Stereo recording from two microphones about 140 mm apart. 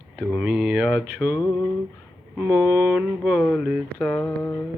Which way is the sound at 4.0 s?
10° left (ahead or behind).